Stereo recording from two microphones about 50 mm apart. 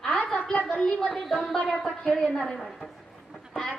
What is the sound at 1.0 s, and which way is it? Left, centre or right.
A woman's voice, centre.